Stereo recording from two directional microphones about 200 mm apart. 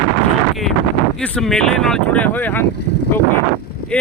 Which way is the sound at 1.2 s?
5° left (ahead or behind).